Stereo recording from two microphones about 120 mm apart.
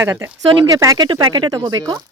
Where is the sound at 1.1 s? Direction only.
40° right (ahead or behind).